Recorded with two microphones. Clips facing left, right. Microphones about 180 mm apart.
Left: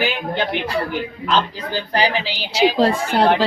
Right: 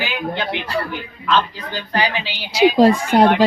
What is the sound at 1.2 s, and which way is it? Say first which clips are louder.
Speech: right 2 dB; 30° left (ahead or behind).